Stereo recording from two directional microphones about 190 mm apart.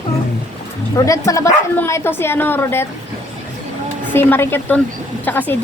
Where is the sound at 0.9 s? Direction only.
15° left (ahead or behind).